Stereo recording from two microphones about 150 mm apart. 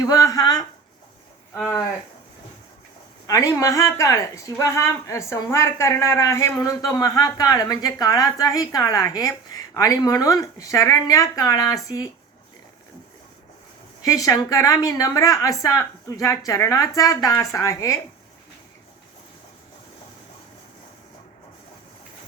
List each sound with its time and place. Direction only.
0.0 s speech: 25° left (ahead or behind)
3.2 s a woman's voice: 20° left (ahead or behind)
14.0 s a woman's voice: 20° left (ahead or behind)